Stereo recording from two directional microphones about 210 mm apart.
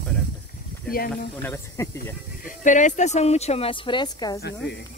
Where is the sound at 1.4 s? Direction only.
10° left (ahead or behind).